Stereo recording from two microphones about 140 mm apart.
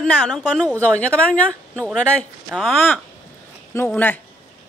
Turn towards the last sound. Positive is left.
turn(degrees=15)  # may be behind; listen again after turning